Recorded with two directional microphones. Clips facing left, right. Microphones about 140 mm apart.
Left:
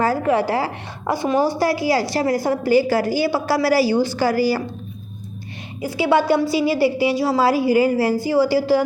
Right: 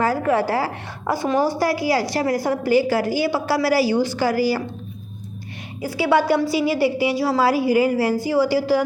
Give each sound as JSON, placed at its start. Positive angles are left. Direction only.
{"t": 0.0, "sound": "a woman's voice", "side_deg": 25}
{"t": 5.8, "sound": "a woman's voice", "side_deg": 20}